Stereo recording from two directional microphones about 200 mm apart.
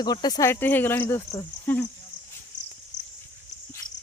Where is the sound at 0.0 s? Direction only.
20° left (ahead or behind).